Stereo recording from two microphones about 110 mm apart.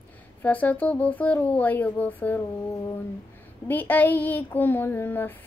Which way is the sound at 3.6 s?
15° left (ahead or behind).